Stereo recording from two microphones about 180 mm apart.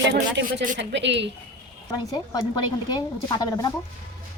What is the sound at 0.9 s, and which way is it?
Speech, 75° right (ahead or behind).